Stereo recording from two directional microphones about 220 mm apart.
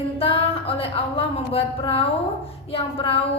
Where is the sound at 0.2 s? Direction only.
25° left (ahead or behind).